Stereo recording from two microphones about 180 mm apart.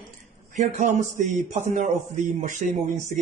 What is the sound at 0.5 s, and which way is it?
Speech, 40° right (ahead or behind).